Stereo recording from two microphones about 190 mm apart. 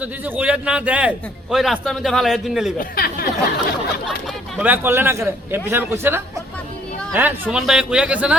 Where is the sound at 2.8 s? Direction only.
50° left (ahead or behind).